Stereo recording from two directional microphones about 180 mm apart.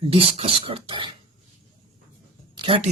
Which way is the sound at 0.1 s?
30° right (ahead or behind).